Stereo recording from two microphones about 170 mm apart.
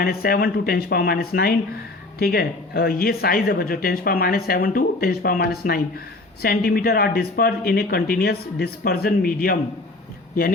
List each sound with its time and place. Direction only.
0.0 s speech: 60° left (ahead or behind)